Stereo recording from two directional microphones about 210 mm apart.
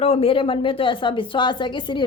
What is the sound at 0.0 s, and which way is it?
A woman's voice, 25° left (ahead or behind).